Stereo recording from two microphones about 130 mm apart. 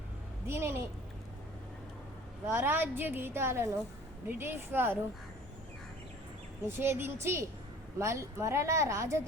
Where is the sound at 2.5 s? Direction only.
15° right (ahead or behind).